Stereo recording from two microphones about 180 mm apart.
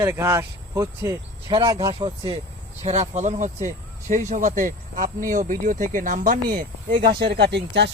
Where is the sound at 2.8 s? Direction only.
40° right (ahead or behind).